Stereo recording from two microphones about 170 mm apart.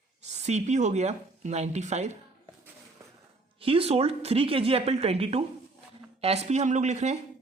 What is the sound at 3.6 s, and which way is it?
Speech, 30° right (ahead or behind).